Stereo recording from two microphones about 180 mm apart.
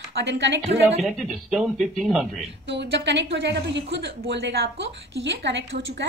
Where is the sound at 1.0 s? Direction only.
Centre (ahead or behind).